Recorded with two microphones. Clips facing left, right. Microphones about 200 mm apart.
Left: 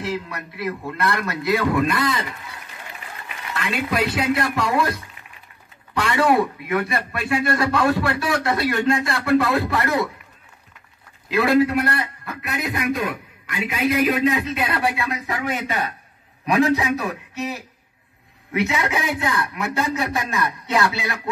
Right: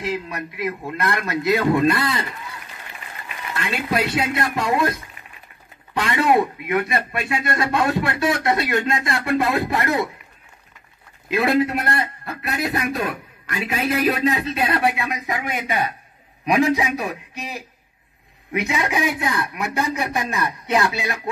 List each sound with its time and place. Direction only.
0.0 s a man's voice: 15° right (ahead or behind)
3.5 s speech: 30° right (ahead or behind)
11.2 s a man's voice: 20° right (ahead or behind)
12.4 s a man's voice: 35° right (ahead or behind); by 21.2 s 15° right (ahead or behind)